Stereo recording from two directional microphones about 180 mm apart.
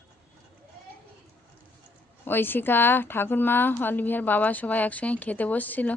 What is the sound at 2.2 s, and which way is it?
A woman's voice, 10° left (ahead or behind).